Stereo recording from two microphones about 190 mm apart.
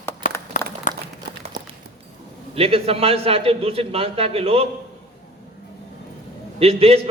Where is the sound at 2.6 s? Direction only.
30° right (ahead or behind).